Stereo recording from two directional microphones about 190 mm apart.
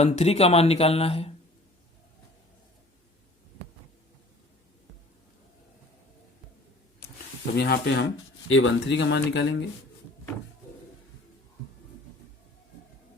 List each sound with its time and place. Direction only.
0.0 s speech: 35° left (ahead or behind)
7.5 s speech: 60° left (ahead or behind)
8.4 s speech: 90° left; by 9.6 s 65° left (ahead or behind)